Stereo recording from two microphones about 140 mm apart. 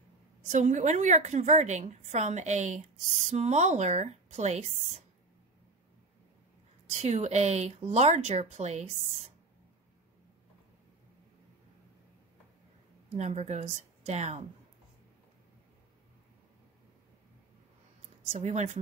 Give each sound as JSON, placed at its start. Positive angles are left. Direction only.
{"t": 0.5, "sound": "a woman's voice", "side_deg": -60}
{"t": 6.9, "sound": "speech", "side_deg": -55}
{"t": 13.2, "sound": "speech", "side_deg": -50}
{"t": 18.3, "sound": "speech", "side_deg": -55}